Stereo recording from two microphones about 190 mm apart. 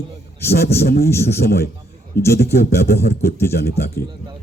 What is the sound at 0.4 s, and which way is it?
A man's voice, 55° left (ahead or behind).